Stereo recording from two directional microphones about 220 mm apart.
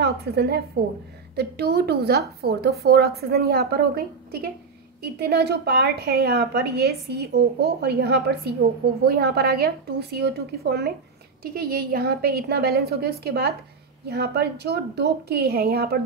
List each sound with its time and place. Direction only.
0.0 s a woman's voice: 45° right (ahead or behind)